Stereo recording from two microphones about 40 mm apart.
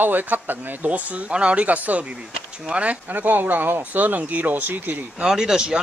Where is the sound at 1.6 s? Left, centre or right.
Right.